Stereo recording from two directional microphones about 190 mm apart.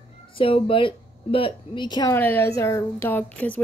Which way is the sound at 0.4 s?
30° left (ahead or behind).